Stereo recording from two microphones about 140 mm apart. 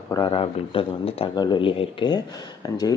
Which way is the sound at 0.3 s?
40° left (ahead or behind).